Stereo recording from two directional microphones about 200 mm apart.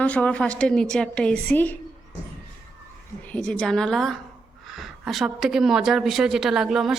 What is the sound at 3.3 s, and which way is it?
A woman's voice, 5° left (ahead or behind).